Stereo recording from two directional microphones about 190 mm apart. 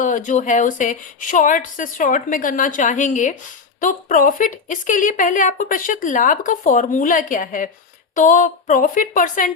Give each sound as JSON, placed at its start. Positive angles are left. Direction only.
{"t": 0.0, "sound": "a woman's voice", "side_deg": 40}